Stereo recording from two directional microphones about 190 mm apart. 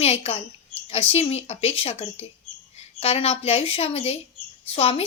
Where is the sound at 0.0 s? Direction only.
35° left (ahead or behind).